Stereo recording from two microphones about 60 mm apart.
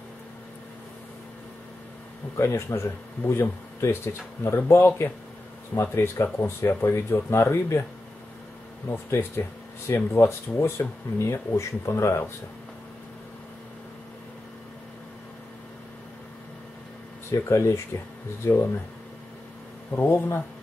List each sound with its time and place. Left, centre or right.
2.3 s speech: left
8.8 s speech: left
17.3 s speech: left
19.9 s speech: left